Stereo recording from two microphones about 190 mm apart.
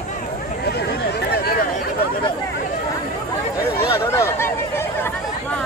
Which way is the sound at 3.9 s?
15° left (ahead or behind).